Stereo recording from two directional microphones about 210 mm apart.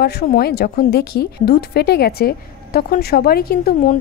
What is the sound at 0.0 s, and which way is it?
Speech, 50° left (ahead or behind).